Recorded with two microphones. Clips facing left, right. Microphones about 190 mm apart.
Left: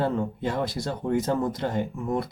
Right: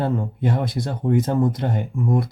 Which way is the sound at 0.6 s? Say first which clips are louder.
Right 3 dB; 55° right (ahead or behind).